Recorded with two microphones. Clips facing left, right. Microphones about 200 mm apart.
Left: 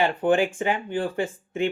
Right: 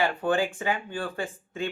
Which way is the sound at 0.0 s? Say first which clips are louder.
Left 4 dB; 20° left (ahead or behind).